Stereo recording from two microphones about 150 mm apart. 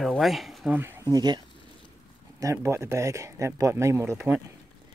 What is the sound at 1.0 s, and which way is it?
Speech, 30° right (ahead or behind).